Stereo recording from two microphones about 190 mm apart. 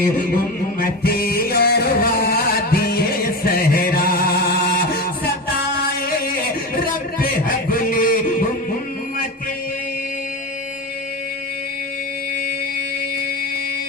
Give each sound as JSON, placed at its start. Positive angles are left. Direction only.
{"t": 0.8, "sound": "music", "side_deg": 55}
{"t": 6.1, "sound": "a sound", "side_deg": 50}
{"t": 6.7, "sound": "music", "side_deg": 50}